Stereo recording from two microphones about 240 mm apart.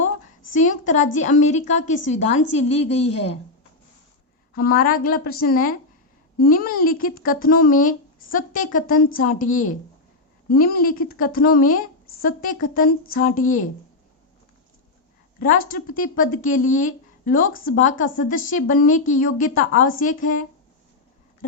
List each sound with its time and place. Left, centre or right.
0.5 s a woman's voice: left
4.5 s speech: left
10.5 s speech: left
15.4 s speech: left